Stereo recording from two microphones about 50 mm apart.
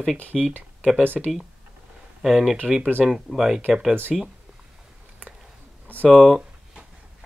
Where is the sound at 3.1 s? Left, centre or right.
Centre.